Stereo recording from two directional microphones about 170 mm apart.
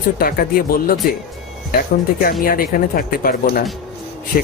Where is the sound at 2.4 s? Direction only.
55° left (ahead or behind).